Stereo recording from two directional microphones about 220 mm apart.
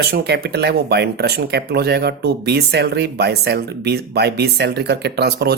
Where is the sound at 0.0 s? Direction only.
45° right (ahead or behind).